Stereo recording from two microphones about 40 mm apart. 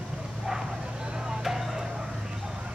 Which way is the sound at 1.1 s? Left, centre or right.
Centre.